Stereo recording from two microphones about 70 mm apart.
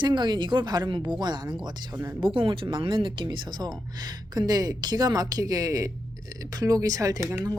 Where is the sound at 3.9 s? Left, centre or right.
Right.